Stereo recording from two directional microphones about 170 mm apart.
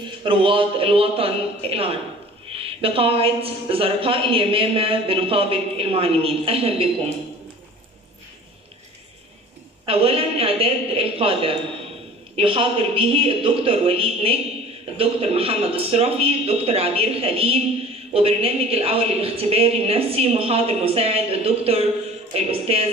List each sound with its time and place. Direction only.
0.2 s a woman's voice: 30° right (ahead or behind)
9.8 s a woman's voice: 35° right (ahead or behind)